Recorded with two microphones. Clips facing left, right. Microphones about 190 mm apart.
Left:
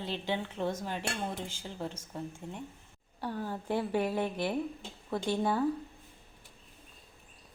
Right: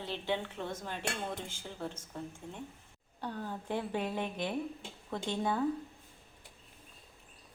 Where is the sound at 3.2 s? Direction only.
5° left (ahead or behind).